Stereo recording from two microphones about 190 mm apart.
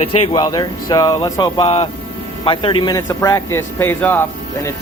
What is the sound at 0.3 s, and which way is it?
A man's voice, 20° left (ahead or behind).